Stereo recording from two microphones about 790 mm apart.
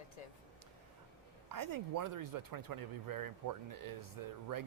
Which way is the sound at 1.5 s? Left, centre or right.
Right.